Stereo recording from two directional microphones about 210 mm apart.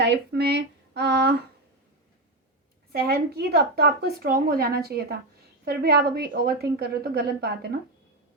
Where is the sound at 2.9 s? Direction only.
50° right (ahead or behind).